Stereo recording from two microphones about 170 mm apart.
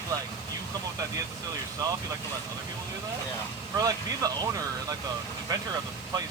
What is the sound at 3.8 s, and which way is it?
Speech, 20° right (ahead or behind).